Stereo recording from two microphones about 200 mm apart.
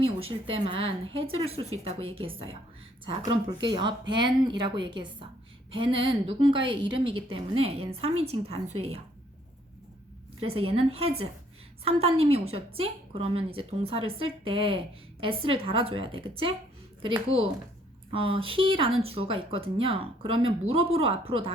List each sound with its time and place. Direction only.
0.0 s a woman's voice: 25° right (ahead or behind)
1.7 s speech: 90° right
2.2 s a woman's voice: 25° right (ahead or behind)
10.4 s speech: 30° right (ahead or behind)